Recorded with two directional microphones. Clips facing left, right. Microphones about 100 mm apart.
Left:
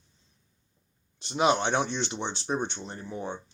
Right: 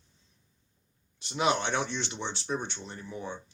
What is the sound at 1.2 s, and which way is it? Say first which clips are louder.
Speech: left 3 dB; 25° left (ahead or behind).